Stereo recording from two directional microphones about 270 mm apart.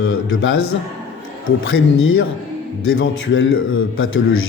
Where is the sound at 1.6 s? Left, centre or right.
Left.